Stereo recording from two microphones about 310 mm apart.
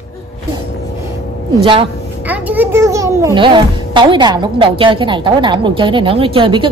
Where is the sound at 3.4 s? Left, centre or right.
Centre.